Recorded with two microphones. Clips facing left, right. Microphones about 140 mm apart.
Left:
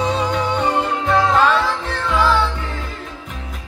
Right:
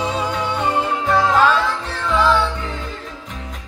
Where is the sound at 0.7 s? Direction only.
5° right (ahead or behind).